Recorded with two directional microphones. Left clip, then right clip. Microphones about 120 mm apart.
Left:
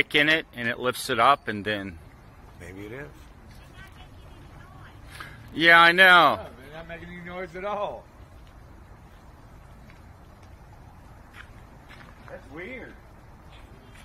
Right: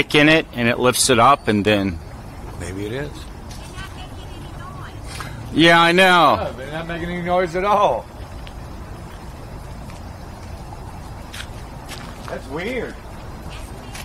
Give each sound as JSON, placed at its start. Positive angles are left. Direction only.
{"t": 0.0, "sound": "speech", "side_deg": -15}
{"t": 5.2, "sound": "speech", "side_deg": -20}